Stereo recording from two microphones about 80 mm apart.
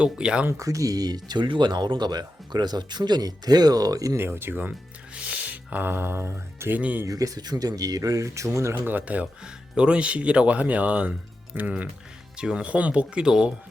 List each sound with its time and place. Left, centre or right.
0.0 s speech: centre
0.4 s speech: right
4.2 s speech: right
5.1 s speech: centre
7.0 s speech: right
8.7 s speech: right